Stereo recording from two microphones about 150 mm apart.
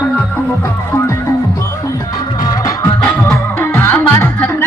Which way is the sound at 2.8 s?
15° left (ahead or behind).